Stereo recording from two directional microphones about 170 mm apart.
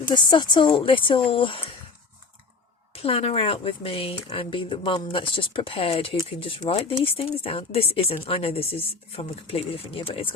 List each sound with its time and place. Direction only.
0.1 s speech: 25° left (ahead or behind)
2.9 s speech: 35° left (ahead or behind)